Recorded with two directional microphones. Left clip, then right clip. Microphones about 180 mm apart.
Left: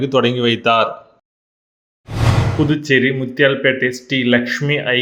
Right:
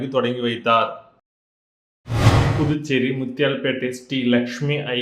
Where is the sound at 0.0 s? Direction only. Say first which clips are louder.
Left 6 dB; 45° left (ahead or behind).